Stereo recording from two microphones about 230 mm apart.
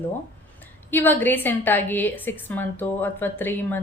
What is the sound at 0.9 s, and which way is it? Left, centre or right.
A woman's voice, centre.